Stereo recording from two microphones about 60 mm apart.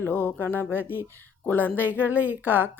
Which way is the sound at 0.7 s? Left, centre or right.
Right.